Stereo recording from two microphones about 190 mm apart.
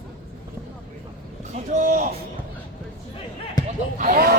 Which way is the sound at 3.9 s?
45° right (ahead or behind).